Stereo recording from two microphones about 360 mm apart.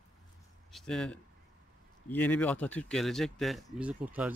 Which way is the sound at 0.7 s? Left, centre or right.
Centre.